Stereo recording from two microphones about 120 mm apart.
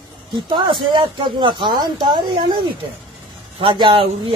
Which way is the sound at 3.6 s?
45° right (ahead or behind).